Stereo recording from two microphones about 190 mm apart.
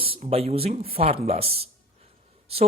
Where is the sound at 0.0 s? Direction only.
30° right (ahead or behind).